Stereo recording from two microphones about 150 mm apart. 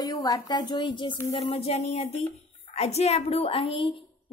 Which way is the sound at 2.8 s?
45° left (ahead or behind).